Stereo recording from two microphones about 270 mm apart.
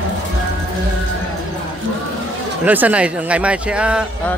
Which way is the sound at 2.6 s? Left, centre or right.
Centre.